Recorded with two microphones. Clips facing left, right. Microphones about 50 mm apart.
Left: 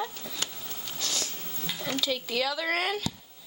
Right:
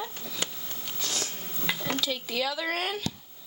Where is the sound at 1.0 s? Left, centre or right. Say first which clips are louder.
Even; right.